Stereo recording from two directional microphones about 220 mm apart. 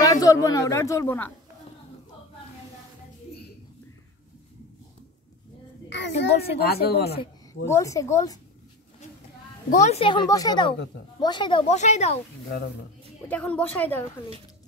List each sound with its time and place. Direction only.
0.0 s speech: 15° left (ahead or behind)
5.9 s a sound: 50° left (ahead or behind)
6.6 s speech: 45° left (ahead or behind)
7.6 s speech: 15° left (ahead or behind)
9.7 s a woman's voice: 30° left (ahead or behind)
13.3 s speech: 5° left (ahead or behind)